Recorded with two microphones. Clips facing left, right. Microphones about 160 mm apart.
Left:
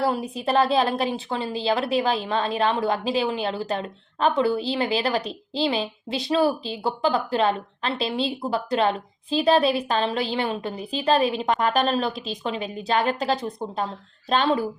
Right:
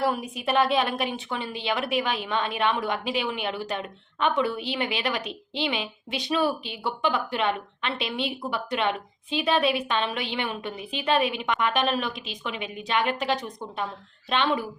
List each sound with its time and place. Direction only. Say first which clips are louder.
0.0 s a woman's voice: left 2 dB; 30° left (ahead or behind)